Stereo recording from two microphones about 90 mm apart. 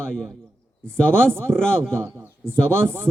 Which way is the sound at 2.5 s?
25° right (ahead or behind).